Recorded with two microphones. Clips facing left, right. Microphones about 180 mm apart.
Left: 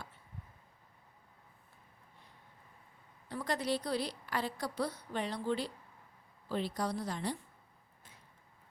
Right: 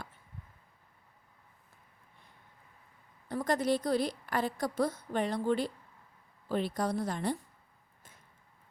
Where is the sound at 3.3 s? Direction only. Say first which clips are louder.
Right 5 dB; 45° right (ahead or behind).